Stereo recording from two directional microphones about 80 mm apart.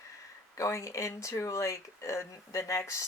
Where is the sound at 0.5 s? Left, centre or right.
Left.